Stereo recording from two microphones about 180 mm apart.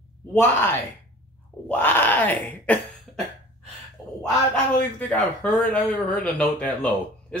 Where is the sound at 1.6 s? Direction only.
10° left (ahead or behind).